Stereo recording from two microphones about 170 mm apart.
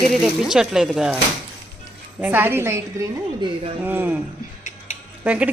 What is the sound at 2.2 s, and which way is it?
Speech, 10° right (ahead or behind).